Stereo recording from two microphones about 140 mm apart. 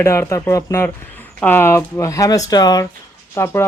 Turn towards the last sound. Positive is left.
turn(degrees=20)  # may be behind; listen again after turning